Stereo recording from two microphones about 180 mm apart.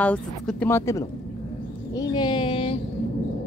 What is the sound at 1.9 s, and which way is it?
Speech, 25° left (ahead or behind).